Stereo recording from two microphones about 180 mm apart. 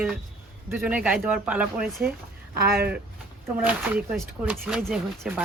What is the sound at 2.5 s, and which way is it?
Speech, 60° right (ahead or behind).